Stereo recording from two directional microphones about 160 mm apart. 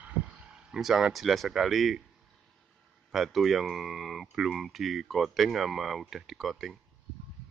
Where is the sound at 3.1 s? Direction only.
Centre (ahead or behind).